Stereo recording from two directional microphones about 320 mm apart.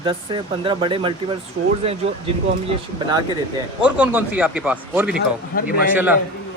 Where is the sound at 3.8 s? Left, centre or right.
Centre.